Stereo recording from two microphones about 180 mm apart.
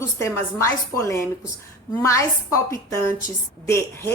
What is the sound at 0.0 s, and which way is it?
A woman's voice, 15° left (ahead or behind).